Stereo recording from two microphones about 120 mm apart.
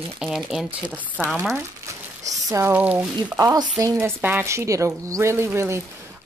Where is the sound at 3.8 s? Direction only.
25° right (ahead or behind).